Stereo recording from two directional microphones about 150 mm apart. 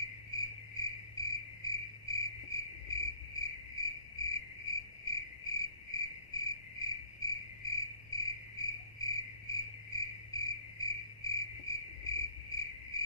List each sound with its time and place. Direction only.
0.4 s cricket: 25° left (ahead or behind)